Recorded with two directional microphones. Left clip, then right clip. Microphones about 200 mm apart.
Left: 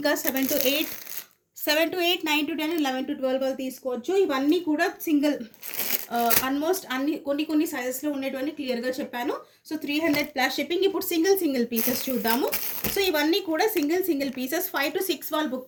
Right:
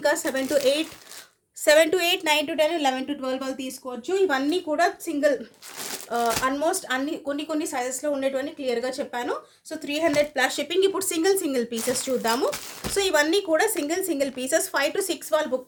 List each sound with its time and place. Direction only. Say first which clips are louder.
0.0 s speech: right 2 dB; 30° right (ahead or behind)
1.6 s a woman's voice: right 5 dB; 55° right (ahead or behind)
6.1 s a woman's voice: right 2 dB; 50° right (ahead or behind)
8.2 s a woman's voice: right 4 dB; 35° right (ahead or behind)